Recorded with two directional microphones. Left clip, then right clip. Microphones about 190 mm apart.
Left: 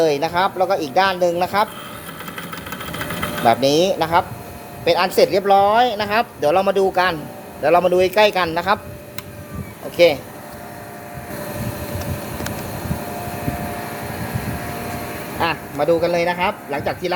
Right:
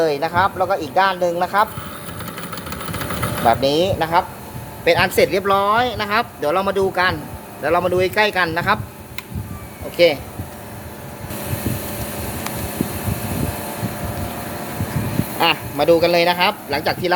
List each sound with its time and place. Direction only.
0.0 s speech: 20° left (ahead or behind)
3.4 s speech: 20° left (ahead or behind)
4.9 s speech: centre (ahead or behind)
10.0 s speech: 10° left (ahead or behind)
15.4 s a man's voice: 10° right (ahead or behind)